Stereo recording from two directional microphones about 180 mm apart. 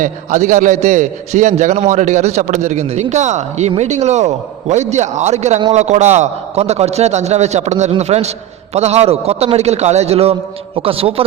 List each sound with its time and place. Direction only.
0.0 s a man's voice: 45° right (ahead or behind)